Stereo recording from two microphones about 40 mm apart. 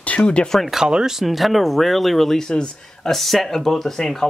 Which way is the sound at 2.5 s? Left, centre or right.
Left.